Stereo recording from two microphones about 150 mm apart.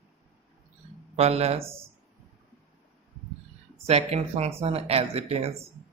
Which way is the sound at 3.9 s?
45° right (ahead or behind).